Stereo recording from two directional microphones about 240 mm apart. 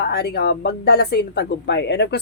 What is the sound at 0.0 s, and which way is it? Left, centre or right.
A woman's voice, left.